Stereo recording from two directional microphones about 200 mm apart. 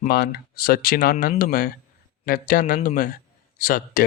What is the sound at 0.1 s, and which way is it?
Speech, 50° left (ahead or behind).